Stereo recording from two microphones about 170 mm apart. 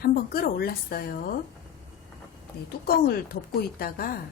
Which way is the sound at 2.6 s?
65° left (ahead or behind).